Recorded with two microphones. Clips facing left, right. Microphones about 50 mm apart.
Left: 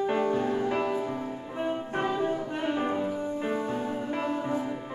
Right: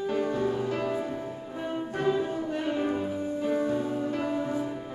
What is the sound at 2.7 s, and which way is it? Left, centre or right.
Music, left.